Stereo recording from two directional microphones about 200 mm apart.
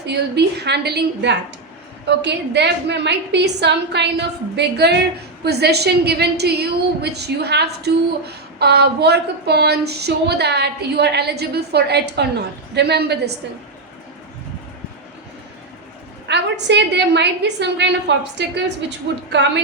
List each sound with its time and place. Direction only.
0.0 s a woman's voice: 55° right (ahead or behind)
16.2 s a woman's voice: 60° right (ahead or behind)